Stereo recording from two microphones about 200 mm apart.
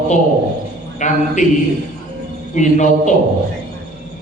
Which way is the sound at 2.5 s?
35° left (ahead or behind).